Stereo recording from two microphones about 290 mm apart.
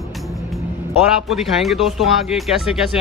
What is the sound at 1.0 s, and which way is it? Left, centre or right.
Speech, centre.